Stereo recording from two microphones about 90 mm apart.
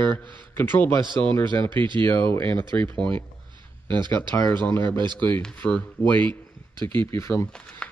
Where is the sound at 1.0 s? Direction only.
60° right (ahead or behind).